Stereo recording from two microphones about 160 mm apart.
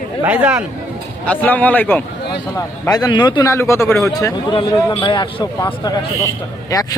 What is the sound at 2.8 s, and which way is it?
Speech, 25° left (ahead or behind).